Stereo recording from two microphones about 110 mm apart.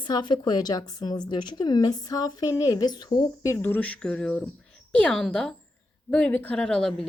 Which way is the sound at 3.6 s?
15° left (ahead or behind).